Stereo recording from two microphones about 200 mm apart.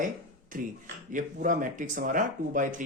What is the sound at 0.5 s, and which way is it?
Speech, 40° right (ahead or behind).